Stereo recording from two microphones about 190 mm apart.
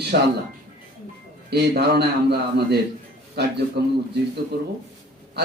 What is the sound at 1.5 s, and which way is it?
A man's voice, 60° right (ahead or behind).